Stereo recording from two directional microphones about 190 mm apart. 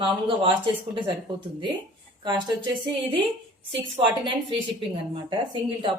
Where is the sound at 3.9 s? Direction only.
25° right (ahead or behind).